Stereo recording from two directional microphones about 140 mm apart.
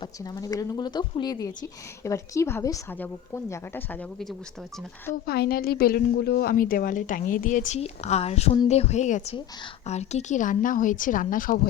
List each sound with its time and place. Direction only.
0.0 s a woman's voice: 25° left (ahead or behind)
5.2 s a woman's voice: 90° left